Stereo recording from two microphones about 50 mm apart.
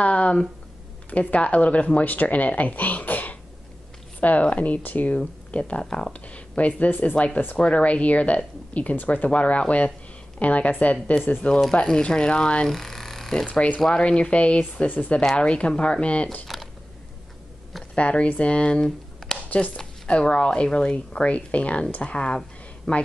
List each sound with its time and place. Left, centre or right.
0.0 s a sound: left
1.1 s speech: left
6.2 s speech: left
12.6 s a sound: centre
13.8 s speech: centre
17.9 s speech: left
18.9 s shuffling cards: centre
20.1 s speech: left